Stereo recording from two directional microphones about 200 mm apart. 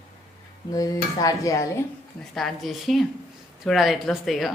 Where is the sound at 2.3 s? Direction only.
Centre (ahead or behind).